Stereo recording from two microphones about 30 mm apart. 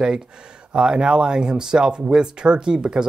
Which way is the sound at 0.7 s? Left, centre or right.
Right.